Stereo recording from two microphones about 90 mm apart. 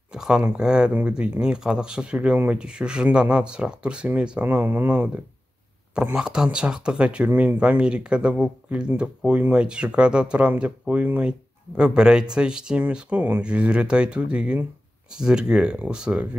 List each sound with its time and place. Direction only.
0.1 s speech: 10° right (ahead or behind)